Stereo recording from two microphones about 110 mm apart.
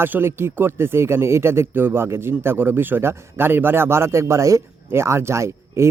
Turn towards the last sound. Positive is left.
turn(degrees=-25)  # may be behind; listen again after turning